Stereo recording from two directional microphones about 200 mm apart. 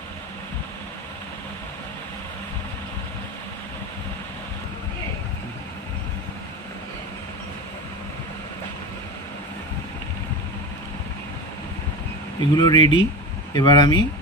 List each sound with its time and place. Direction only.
12.4 s speech: 20° left (ahead or behind)